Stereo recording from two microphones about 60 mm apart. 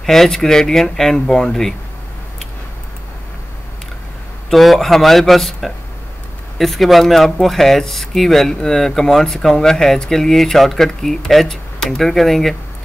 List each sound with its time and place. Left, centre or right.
0.0 s speech: centre
4.5 s speech: centre